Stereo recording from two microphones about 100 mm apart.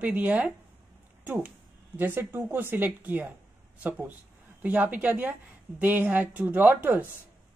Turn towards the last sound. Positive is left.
turn(degrees=-15)  # may be behind; listen again after turning